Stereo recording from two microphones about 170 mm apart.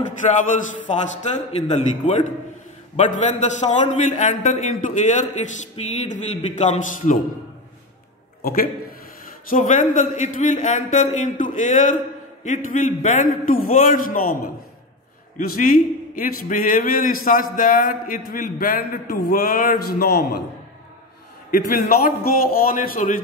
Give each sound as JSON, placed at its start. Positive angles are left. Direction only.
{"t": 0.2, "sound": "a man's voice", "side_deg": 45}
{"t": 8.4, "sound": "a man's voice", "side_deg": 60}
{"t": 9.5, "sound": "a man's voice", "side_deg": 45}
{"t": 15.3, "sound": "a man's voice", "side_deg": 55}
{"t": 21.5, "sound": "a man's voice", "side_deg": 60}